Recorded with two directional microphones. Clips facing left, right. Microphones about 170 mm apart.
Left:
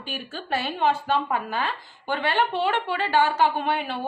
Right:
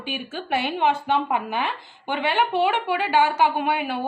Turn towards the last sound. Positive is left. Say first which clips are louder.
# right 2 dB
turn(degrees=-10)  # may be behind; listen again after turning